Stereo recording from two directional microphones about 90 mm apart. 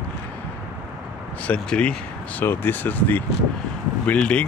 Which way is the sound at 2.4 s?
20° left (ahead or behind).